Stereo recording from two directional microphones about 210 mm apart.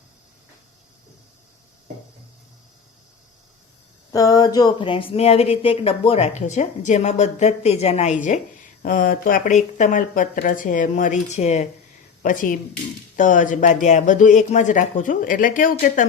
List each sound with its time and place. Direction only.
4.1 s speech: 15° left (ahead or behind); by 16.0 s 40° left (ahead or behind)